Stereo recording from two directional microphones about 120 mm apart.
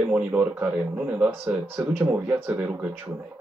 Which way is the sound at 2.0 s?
15° right (ahead or behind).